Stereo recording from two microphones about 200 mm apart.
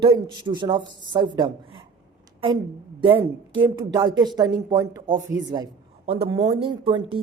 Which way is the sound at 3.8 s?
20° right (ahead or behind).